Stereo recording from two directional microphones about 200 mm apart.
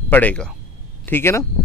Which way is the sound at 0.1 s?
5° left (ahead or behind).